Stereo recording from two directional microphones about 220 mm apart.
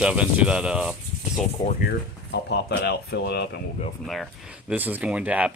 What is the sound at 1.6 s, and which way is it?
Speech, 45° left (ahead or behind).